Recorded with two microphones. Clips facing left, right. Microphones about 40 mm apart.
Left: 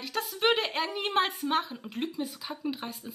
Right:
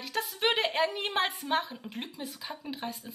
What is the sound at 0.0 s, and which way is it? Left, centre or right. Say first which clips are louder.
A woman's voice: left 2 dB; centre.